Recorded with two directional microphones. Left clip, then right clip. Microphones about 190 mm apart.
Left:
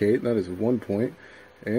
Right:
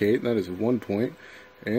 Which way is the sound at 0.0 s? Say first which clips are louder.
Left 1 dB; 5° right (ahead or behind).